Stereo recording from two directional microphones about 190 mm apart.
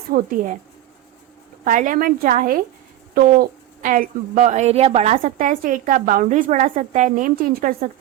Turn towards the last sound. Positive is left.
turn(degrees=-45)  # may be behind; listen again after turning